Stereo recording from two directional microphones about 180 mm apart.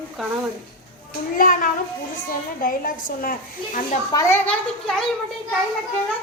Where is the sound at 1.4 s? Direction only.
50° left (ahead or behind).